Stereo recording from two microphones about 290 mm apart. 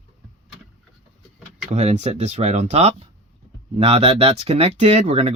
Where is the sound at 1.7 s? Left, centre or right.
Right.